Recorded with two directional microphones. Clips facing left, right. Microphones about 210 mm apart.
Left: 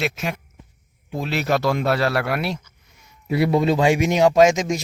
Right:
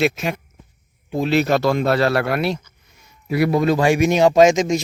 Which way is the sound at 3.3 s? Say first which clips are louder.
Right 1 dB; 25° left (ahead or behind).